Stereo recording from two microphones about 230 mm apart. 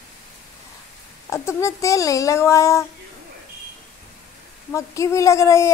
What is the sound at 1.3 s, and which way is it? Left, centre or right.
Speech, centre.